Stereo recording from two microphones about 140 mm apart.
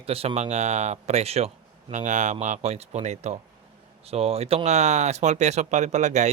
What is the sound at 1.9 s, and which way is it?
Speech, 60° right (ahead or behind).